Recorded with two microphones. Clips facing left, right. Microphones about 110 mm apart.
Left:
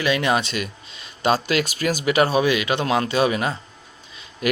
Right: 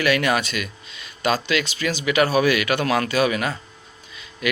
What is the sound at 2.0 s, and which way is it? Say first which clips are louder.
Speech: even; 30° left (ahead or behind).